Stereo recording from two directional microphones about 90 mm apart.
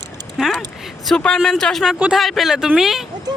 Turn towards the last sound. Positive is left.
turn(degrees=-5)  # may be behind; listen again after turning